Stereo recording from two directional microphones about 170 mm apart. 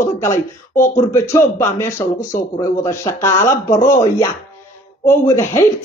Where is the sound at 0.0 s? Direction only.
15° left (ahead or behind).